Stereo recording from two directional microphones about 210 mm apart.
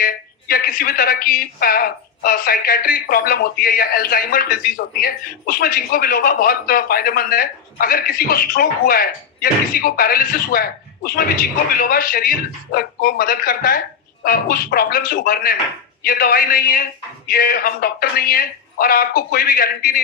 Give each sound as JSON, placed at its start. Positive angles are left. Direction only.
{"t": 0.0, "sound": "a woman's voice", "side_deg": 45}